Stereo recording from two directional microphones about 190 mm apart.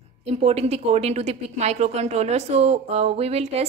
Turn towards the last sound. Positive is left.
turn(degrees=-35)  # may be behind; listen again after turning